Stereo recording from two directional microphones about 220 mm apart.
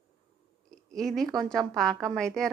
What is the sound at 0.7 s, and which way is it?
A woman's voice, centre (ahead or behind).